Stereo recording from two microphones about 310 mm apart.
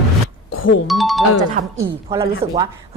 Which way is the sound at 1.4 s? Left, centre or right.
Centre.